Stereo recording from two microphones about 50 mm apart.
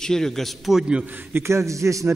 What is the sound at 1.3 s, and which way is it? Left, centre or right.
Speech, right.